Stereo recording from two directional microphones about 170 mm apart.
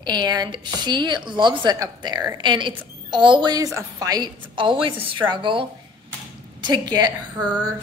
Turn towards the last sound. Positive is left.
turn(degrees=-25)  # may be behind; listen again after turning